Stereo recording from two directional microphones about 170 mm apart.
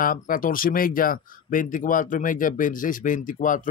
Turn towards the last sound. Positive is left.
turn(degrees=50)  # may be behind; listen again after turning